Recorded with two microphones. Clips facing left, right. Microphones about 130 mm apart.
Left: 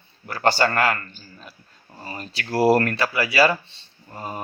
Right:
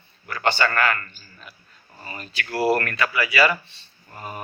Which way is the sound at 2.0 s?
35° left (ahead or behind).